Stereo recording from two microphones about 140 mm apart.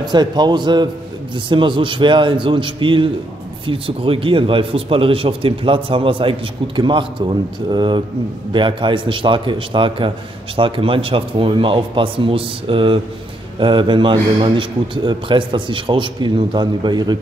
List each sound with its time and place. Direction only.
0.0 s a man's voice: 30° right (ahead or behind)